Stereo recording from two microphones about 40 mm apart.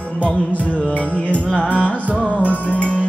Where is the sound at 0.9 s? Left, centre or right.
Left.